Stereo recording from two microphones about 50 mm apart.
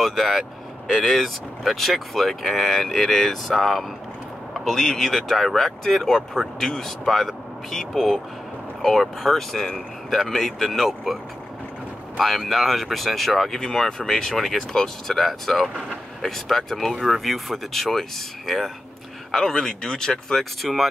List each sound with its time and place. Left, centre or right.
0.0 s speech: centre
12.2 s speech: centre
16.9 s speech: centre
19.3 s speech: centre
20.6 s speech: centre